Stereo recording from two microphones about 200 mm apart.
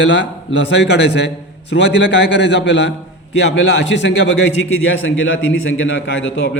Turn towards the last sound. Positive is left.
turn(degrees=65)  # may be behind; listen again after turning